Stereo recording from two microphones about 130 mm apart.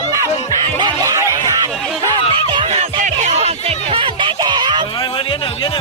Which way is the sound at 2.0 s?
40° right (ahead or behind).